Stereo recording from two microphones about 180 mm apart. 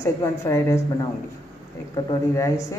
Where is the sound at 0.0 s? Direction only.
15° left (ahead or behind).